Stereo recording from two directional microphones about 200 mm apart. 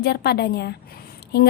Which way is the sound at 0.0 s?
55° left (ahead or behind).